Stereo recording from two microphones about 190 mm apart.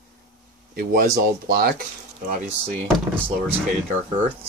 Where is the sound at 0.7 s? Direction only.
50° right (ahead or behind).